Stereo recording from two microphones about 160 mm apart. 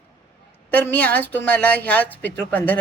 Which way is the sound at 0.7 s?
10° left (ahead or behind).